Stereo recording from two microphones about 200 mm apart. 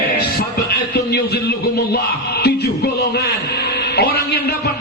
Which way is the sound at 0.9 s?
55° left (ahead or behind).